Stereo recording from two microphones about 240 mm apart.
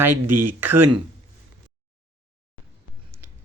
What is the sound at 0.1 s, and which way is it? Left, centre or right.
Speech, right.